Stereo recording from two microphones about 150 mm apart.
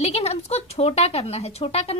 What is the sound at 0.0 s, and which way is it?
A woman's voice, 45° left (ahead or behind).